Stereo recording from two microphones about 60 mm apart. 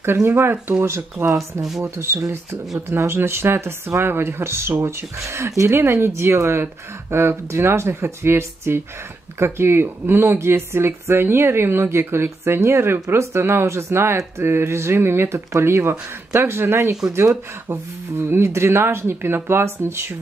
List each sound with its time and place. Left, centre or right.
0.0 s speech: right
1.6 s speech: centre
2.0 s speech: right